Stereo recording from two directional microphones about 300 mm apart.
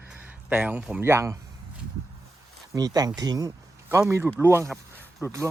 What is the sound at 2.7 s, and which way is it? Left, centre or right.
Speech, centre.